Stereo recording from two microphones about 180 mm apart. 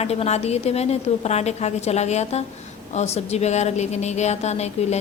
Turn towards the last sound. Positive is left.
turn(degrees=35)  # may be behind; listen again after turning